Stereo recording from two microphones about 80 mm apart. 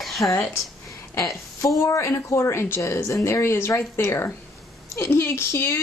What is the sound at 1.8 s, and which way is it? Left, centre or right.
Speech, left.